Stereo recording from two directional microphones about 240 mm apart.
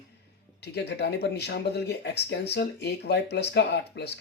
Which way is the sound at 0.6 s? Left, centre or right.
Left.